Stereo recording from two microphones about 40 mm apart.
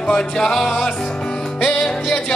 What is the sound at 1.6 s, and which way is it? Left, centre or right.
Music, left.